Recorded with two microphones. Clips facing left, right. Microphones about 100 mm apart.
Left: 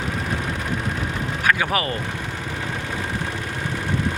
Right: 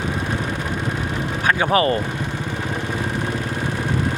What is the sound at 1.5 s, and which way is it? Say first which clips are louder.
Speech: right 4 dB; 30° right (ahead or behind).